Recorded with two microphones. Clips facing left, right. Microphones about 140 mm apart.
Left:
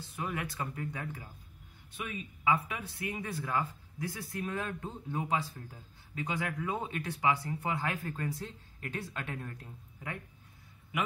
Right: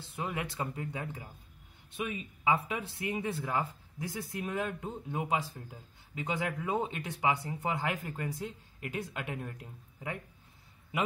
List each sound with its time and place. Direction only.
0.0 s speech: 25° right (ahead or behind)